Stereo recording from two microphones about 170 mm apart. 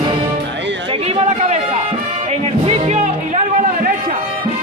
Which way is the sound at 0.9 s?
35° right (ahead or behind).